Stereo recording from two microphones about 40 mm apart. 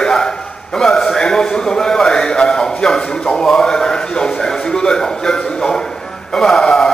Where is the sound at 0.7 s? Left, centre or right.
Centre.